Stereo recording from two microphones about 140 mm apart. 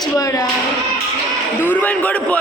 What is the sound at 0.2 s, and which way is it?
Speech, 25° left (ahead or behind).